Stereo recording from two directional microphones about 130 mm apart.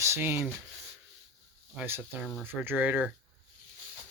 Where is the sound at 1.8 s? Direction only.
15° right (ahead or behind).